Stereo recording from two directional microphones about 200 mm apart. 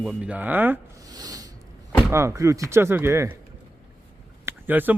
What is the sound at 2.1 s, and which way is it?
Speech, 15° right (ahead or behind).